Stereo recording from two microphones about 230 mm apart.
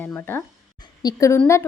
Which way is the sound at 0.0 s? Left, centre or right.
Centre.